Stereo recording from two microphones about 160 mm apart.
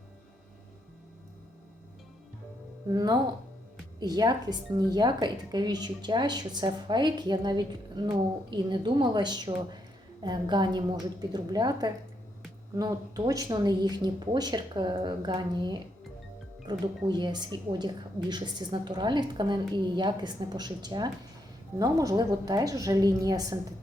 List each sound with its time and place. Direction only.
2.9 s a woman's voice: 25° right (ahead or behind)